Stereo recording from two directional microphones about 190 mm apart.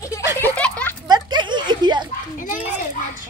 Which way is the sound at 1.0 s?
25° right (ahead or behind).